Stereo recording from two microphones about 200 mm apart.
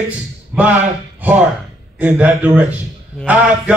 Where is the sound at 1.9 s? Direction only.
5° right (ahead or behind).